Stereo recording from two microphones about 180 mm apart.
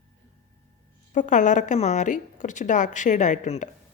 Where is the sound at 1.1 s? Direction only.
45° left (ahead or behind).